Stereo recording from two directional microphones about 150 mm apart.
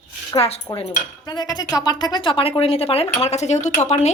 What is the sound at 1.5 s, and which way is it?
A woman's voice, 25° left (ahead or behind).